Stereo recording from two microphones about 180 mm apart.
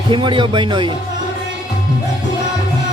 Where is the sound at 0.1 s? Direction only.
25° right (ahead or behind).